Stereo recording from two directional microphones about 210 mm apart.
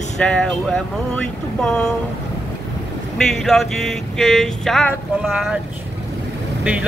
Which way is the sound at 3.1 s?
Centre (ahead or behind).